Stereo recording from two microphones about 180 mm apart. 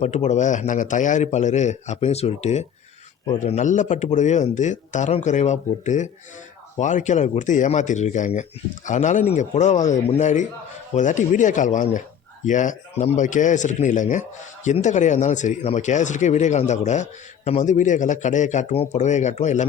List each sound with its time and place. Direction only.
0.0 s a man's voice: 40° left (ahead or behind)